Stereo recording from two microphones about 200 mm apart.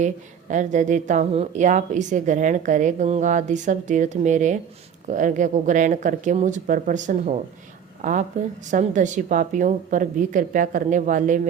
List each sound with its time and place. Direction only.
0.0 s speech: 40° right (ahead or behind)
8.7 s speech: 40° right (ahead or behind)